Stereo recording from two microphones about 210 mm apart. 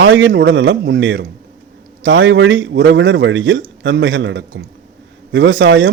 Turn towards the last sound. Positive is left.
turn(degrees=-60)  # may be behind; listen again after turning